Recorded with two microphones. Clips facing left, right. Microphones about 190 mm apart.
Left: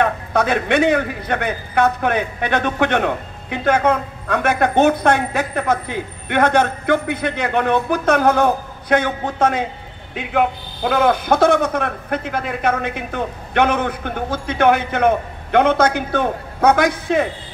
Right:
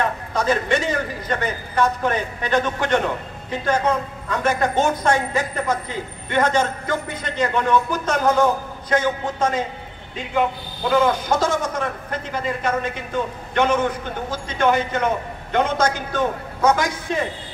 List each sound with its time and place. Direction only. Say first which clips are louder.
0.0 s a man's voice: left 4 dB; 60° left (ahead or behind)